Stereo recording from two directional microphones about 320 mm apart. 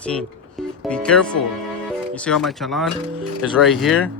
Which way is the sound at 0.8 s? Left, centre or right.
Centre.